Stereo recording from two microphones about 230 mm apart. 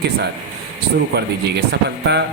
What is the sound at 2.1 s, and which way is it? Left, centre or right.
Speech, right.